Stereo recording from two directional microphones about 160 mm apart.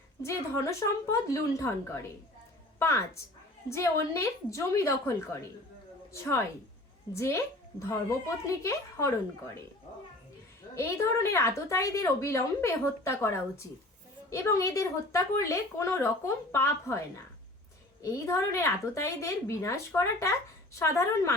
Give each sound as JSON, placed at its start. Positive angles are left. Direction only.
{"t": 0.2, "sound": "a woman's voice", "side_deg": 20}
{"t": 2.7, "sound": "a woman's voice", "side_deg": 15}
{"t": 7.2, "sound": "a woman's voice", "side_deg": 20}
{"t": 10.8, "sound": "a woman's voice", "side_deg": 15}
{"t": 18.0, "sound": "a woman's voice", "side_deg": 20}